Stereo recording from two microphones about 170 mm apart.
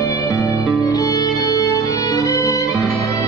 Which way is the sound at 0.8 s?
20° left (ahead or behind).